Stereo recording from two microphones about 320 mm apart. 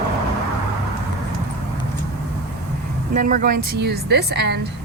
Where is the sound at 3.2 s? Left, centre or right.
Right.